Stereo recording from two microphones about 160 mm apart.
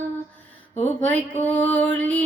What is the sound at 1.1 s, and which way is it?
Music, 10° left (ahead or behind).